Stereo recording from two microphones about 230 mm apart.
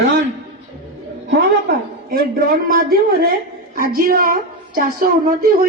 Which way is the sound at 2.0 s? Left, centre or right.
Right.